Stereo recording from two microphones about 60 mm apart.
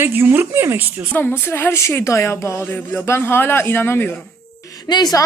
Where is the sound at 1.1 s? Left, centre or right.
Left.